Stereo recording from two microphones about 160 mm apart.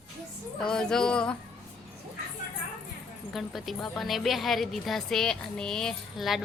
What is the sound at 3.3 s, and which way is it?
Speech, centre (ahead or behind).